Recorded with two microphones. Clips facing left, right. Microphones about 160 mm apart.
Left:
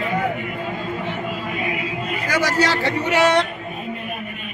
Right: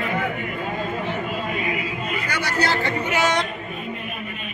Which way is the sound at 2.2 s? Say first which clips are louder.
Left 6 dB; 90° left.